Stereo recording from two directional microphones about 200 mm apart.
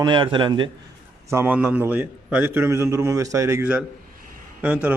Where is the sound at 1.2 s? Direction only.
10° right (ahead or behind).